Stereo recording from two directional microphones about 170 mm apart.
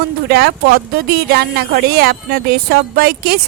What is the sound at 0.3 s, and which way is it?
Speech, 65° right (ahead or behind).